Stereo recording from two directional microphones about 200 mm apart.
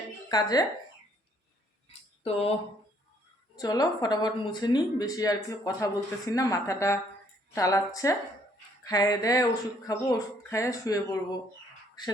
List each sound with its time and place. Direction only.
0.3 s speech: 20° left (ahead or behind)
2.2 s speech: 30° left (ahead or behind)
3.6 s a woman's voice: 20° left (ahead or behind)